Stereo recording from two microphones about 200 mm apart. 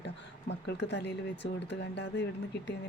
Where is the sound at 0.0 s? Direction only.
60° left (ahead or behind).